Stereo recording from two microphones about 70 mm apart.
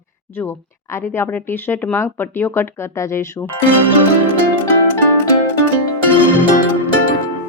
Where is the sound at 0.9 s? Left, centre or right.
Left.